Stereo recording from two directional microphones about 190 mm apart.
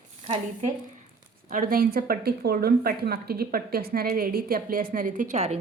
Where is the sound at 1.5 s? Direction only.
45° right (ahead or behind).